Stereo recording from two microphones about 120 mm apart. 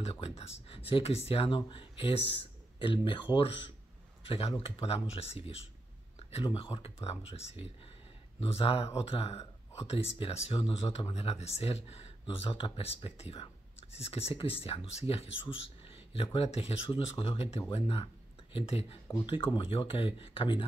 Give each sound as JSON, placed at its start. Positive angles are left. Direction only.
{"t": 0.0, "sound": "speech", "side_deg": 55}
{"t": 4.2, "sound": "speech", "side_deg": 55}
{"t": 15.5, "sound": "whispering", "side_deg": 50}
{"t": 16.3, "sound": "speech", "side_deg": 60}
{"t": 19.2, "sound": "speech", "side_deg": 45}